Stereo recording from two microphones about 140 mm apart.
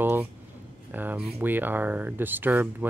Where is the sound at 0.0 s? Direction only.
15° right (ahead or behind).